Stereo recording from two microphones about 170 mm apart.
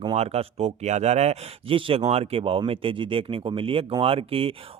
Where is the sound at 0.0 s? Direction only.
35° right (ahead or behind).